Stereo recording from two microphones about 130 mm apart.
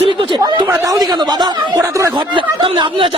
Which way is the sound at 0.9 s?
30° right (ahead or behind).